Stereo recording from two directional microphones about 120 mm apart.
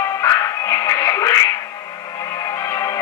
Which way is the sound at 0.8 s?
25° left (ahead or behind).